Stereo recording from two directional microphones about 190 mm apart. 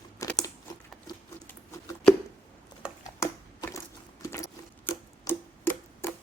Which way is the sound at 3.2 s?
15° left (ahead or behind).